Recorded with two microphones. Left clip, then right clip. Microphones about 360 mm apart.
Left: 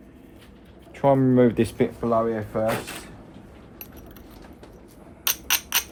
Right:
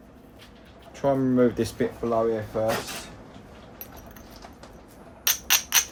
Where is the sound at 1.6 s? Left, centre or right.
Left.